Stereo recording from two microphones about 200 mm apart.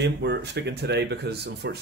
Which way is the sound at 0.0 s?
60° right (ahead or behind).